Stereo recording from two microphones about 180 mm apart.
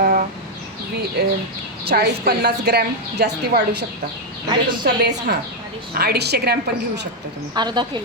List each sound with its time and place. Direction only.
0.0 s a sound: 50° right (ahead or behind)
1.2 s a woman's voice: 65° right (ahead or behind)
7.5 s a woman's voice: 25° right (ahead or behind)